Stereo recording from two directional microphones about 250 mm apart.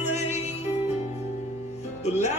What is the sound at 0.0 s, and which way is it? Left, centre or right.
Music, left.